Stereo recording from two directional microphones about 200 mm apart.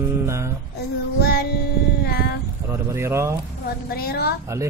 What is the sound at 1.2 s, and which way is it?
Child singing, 50° left (ahead or behind).